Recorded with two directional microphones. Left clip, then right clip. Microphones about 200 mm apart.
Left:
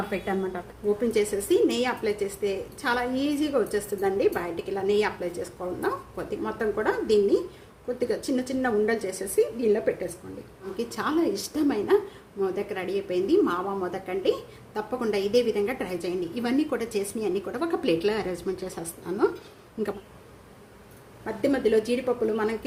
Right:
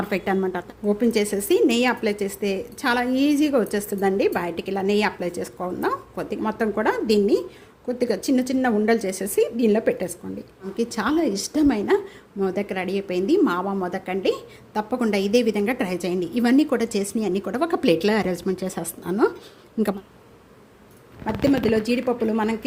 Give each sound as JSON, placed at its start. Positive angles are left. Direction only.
{"t": 0.1, "sound": "a woman's voice", "side_deg": -50}
{"t": 10.8, "sound": "a woman's voice", "side_deg": -40}
{"t": 21.2, "sound": "a woman's voice", "side_deg": -45}